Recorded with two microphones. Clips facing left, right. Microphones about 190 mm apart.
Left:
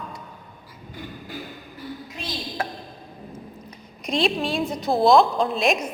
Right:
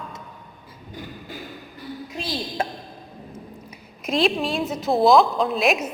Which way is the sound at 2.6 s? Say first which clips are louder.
Right 2 dB; 25° right (ahead or behind).